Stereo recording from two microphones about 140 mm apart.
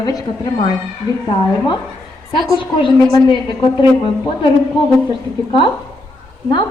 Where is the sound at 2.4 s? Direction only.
35° left (ahead or behind).